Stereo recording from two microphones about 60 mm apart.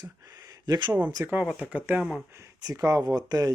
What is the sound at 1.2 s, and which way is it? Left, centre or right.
Speech, right.